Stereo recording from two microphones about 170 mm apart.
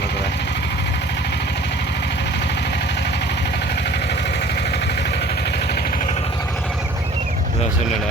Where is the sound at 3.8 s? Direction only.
80° left.